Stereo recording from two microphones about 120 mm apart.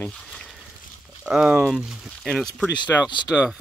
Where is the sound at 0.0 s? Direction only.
5° left (ahead or behind).